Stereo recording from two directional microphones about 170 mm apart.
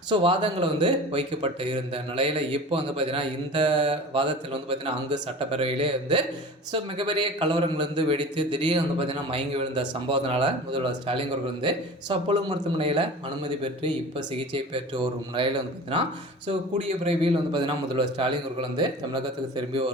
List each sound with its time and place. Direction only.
0.1 s a man's voice: 30° right (ahead or behind)